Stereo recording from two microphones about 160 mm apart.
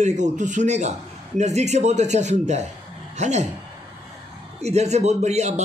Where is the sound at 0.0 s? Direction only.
45° right (ahead or behind).